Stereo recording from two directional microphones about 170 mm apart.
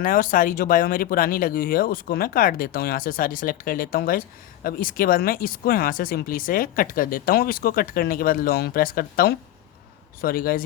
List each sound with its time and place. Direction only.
0.0 s speech: 55° left (ahead or behind)